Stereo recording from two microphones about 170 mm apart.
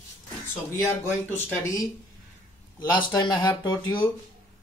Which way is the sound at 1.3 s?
10° left (ahead or behind).